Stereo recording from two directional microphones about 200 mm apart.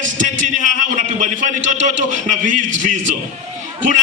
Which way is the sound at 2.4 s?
40° right (ahead or behind).